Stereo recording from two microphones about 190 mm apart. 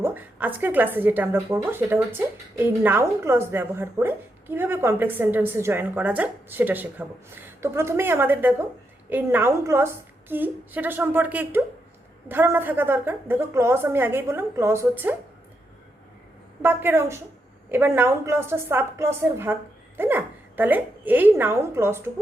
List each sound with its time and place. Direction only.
0.0 s a woman's voice: 10° right (ahead or behind)
16.6 s a woman's voice: 10° right (ahead or behind)